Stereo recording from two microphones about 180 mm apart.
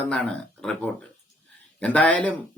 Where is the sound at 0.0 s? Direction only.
5° left (ahead or behind).